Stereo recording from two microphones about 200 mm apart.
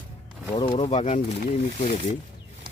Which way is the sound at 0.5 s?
25° left (ahead or behind).